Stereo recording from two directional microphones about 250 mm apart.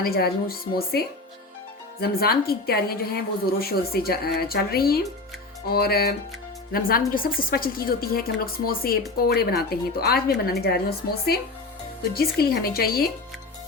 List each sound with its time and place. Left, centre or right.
0.0 s a woman's voice: left